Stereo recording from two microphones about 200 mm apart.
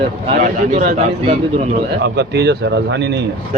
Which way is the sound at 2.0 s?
55° right (ahead or behind).